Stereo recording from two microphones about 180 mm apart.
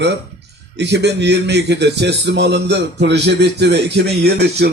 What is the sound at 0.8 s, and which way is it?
A man's voice, 70° right (ahead or behind).